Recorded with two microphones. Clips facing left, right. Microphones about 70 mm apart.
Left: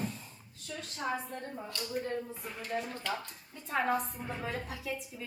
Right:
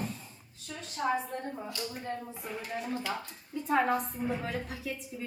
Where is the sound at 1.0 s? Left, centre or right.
Centre.